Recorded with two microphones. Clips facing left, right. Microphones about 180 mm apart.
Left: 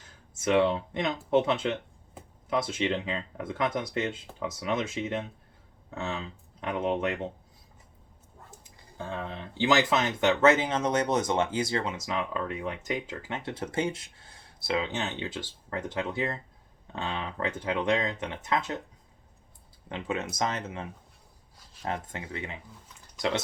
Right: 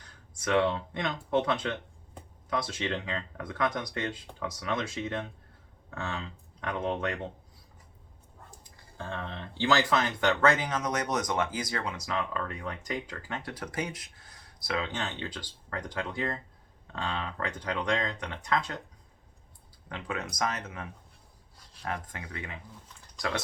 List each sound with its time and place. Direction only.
0.3 s speech: 25° left (ahead or behind)
8.4 s speech: 15° left (ahead or behind)
19.9 s speech: 20° left (ahead or behind)
21.6 s speech: centre (ahead or behind)
21.8 s speech: 25° left (ahead or behind)